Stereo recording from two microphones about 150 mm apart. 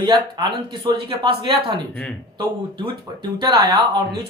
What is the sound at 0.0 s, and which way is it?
Speech, 30° right (ahead or behind).